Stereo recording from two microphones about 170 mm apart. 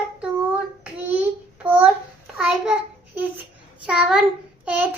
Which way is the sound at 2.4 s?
5° right (ahead or behind).